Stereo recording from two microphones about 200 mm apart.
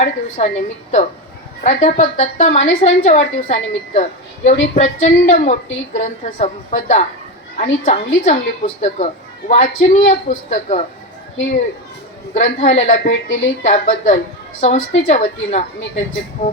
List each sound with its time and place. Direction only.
0.0 s a woman's voice: 35° left (ahead or behind)
12.3 s a woman's voice: 35° left (ahead or behind)